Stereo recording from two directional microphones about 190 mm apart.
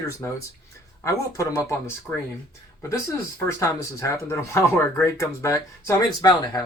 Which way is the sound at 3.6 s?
15° left (ahead or behind).